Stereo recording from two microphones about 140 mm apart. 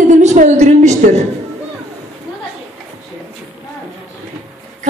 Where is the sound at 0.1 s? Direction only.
55° right (ahead or behind).